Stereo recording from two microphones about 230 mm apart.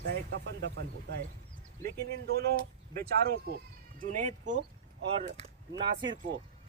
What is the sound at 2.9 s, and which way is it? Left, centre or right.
Speech, right.